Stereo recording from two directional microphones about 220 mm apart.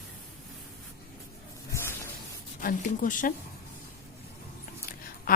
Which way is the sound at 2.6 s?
40° left (ahead or behind).